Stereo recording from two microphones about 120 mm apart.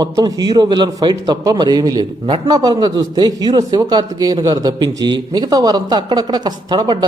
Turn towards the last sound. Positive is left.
turn(degrees=-35)  # may be behind; listen again after turning